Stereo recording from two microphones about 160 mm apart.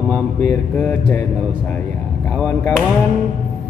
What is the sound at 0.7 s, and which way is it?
Mantra, 10° left (ahead or behind).